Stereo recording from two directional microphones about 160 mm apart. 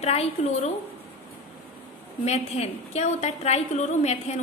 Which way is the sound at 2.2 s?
40° left (ahead or behind).